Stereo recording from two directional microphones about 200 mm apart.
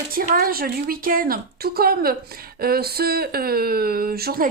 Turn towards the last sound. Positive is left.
turn(degrees=-50)  # may be behind; listen again after turning